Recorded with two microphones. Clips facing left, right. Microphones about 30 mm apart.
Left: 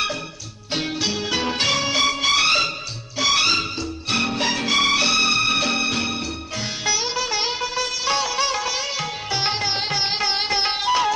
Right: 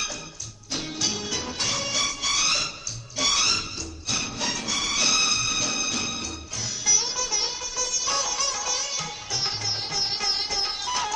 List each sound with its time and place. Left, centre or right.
0.7 s music: left
1.3 s music: left
5.0 s music: left
6.8 s sitar: left
10.6 s music: left